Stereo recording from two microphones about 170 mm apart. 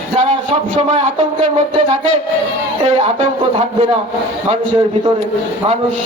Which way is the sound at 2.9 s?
35° right (ahead or behind).